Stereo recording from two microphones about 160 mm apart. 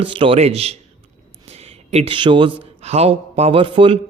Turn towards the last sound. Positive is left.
turn(degrees=-35)  # may be behind; listen again after turning